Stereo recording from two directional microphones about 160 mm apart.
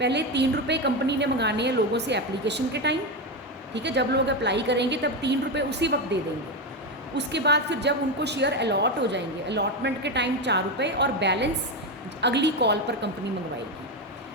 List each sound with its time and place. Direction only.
0.0 s a woman's voice: 90° right